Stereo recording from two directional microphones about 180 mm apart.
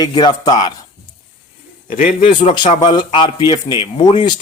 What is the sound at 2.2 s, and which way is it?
Speech, 25° left (ahead or behind).